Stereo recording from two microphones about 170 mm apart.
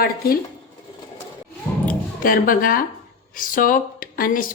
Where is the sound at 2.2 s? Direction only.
55° left (ahead or behind).